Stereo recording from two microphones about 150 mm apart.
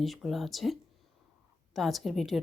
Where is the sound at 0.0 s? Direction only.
Centre (ahead or behind).